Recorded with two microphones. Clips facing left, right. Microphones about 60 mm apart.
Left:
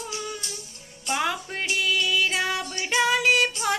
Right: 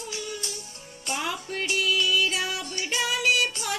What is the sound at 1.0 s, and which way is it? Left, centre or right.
Music, left.